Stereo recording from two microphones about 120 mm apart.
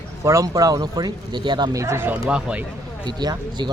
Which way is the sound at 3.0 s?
35° right (ahead or behind).